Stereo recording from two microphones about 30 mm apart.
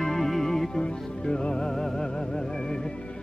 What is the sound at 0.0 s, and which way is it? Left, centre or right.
Music, centre.